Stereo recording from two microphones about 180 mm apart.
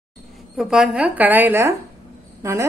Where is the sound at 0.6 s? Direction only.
5° right (ahead or behind).